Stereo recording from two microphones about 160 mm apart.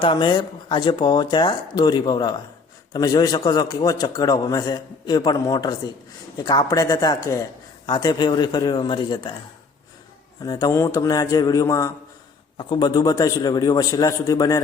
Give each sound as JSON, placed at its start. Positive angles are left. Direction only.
{"t": 0.0, "sound": "a man's voice", "side_deg": 30}
{"t": 10.4, "sound": "a man's voice", "side_deg": 25}